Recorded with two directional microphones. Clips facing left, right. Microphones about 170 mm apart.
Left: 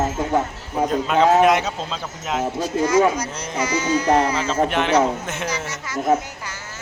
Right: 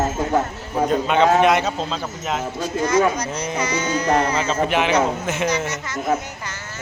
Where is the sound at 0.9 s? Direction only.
Centre (ahead or behind).